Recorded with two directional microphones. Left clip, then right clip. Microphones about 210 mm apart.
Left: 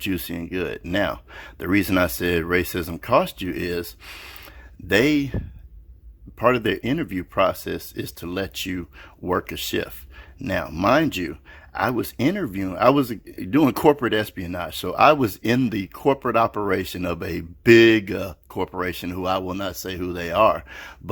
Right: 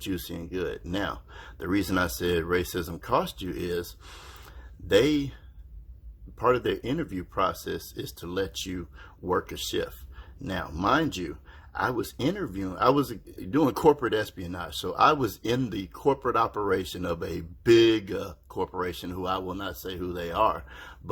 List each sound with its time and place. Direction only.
0.0 s speech: 40° left (ahead or behind)
4.9 s speech: 40° left (ahead or behind)
6.4 s speech: 40° left (ahead or behind)